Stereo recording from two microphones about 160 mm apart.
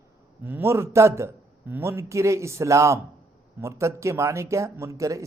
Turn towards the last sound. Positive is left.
turn(degrees=-20)  # may be behind; listen again after turning